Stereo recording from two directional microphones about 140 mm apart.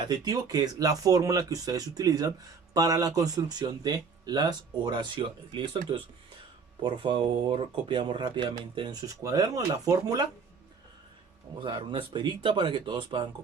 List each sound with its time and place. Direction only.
0.0 s speech: 30° right (ahead or behind)
9.0 s speech: 25° right (ahead or behind)
11.6 s speech: 35° right (ahead or behind)